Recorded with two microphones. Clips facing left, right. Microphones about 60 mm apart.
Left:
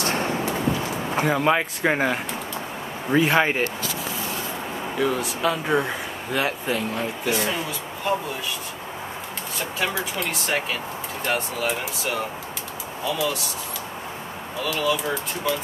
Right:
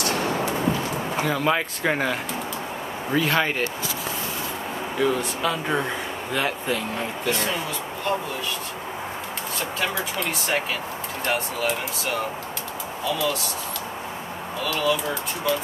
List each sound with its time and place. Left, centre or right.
0.0 s a sound: left
1.2 s speech: centre
4.9 s speech: centre
9.6 s speech: centre
14.6 s speech: centre